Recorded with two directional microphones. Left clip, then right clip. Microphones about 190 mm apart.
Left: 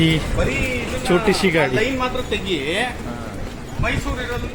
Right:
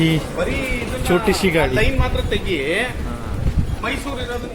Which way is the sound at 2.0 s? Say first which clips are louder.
Even; 70° left (ahead or behind).